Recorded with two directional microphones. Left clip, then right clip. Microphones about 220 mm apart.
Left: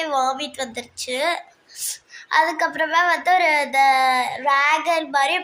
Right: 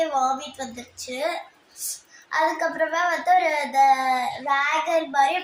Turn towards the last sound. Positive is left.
turn(degrees=50)  # may be behind; listen again after turning